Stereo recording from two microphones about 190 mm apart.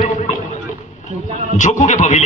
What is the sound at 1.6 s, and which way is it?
Speech, 40° left (ahead or behind).